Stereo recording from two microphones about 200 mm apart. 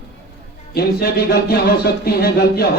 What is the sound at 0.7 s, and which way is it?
Speech, 50° left (ahead or behind).